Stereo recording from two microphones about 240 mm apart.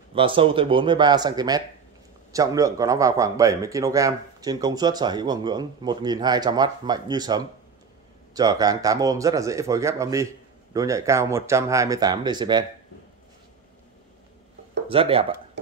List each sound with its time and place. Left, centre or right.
0.1 s speech: right
14.9 s speech: right